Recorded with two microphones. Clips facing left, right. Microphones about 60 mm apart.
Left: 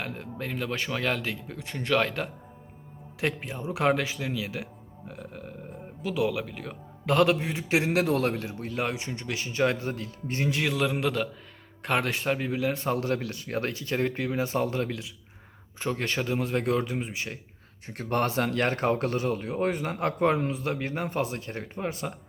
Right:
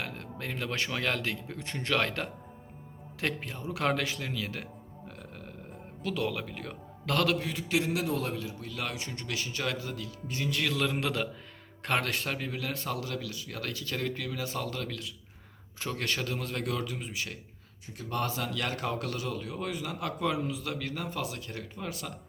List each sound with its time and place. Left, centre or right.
0.0 s a man's voice: centre; by 7.9 s left
7.9 s speech: left
10.7 s a man's voice: centre; by 13.0 s left
13.0 s speech: left
15.8 s a man's voice: centre
16.6 s a man's voice: left
17.8 s speech: left